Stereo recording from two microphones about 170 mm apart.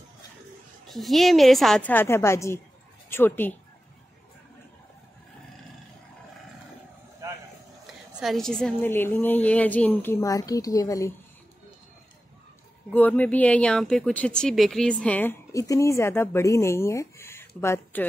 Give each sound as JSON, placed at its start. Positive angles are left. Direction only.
{"t": 0.8, "sound": "a woman's voice", "side_deg": 0}
{"t": 7.8, "sound": "speech", "side_deg": 0}
{"t": 10.2, "sound": "a woman's voice", "side_deg": 20}
{"t": 12.9, "sound": "speech", "side_deg": 10}